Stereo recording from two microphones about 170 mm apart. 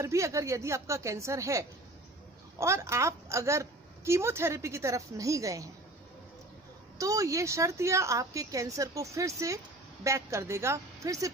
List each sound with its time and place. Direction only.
0.0 s a woman's voice: 15° right (ahead or behind)
7.0 s a woman's voice: 20° right (ahead or behind)